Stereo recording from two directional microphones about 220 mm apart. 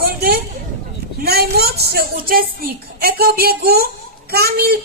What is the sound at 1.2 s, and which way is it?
A woman's voice, 45° right (ahead or behind).